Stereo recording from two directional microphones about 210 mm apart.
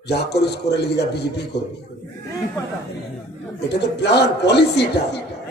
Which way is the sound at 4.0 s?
55° left (ahead or behind).